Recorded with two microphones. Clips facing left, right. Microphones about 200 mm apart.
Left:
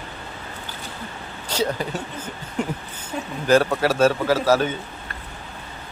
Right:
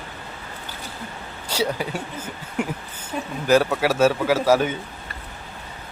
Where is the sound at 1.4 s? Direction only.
10° right (ahead or behind).